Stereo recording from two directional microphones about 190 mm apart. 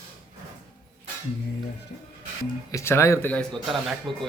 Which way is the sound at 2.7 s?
15° left (ahead or behind).